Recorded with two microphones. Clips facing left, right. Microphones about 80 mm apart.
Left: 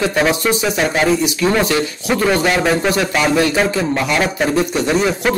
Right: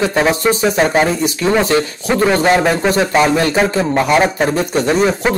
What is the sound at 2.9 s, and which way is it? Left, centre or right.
A man's voice, right.